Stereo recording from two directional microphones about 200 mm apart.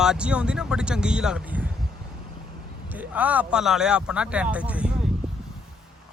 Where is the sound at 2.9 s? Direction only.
5° right (ahead or behind).